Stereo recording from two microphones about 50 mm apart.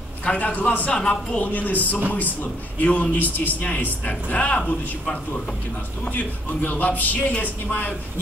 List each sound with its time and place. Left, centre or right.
0.2 s a man's voice: left
0.9 s a man's voice: centre
1.4 s a man's voice: left
6.1 s a man's voice: left